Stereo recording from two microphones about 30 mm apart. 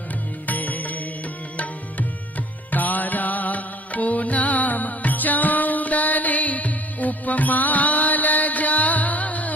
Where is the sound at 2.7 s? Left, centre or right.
Left.